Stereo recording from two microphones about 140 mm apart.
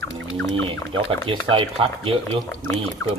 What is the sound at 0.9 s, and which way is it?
Speech, 40° right (ahead or behind).